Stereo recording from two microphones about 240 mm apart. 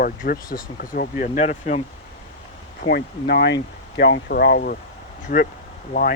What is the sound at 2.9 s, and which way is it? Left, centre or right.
Speech, left.